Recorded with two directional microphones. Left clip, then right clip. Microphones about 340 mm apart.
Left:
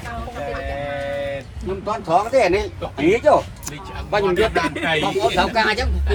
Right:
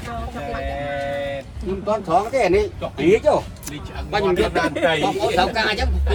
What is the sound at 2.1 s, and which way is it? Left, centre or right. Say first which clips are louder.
Speech: left 2 dB; left.